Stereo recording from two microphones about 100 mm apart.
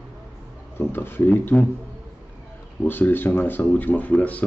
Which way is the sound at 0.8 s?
20° left (ahead or behind).